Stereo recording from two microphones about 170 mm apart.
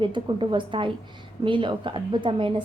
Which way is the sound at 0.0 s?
30° right (ahead or behind).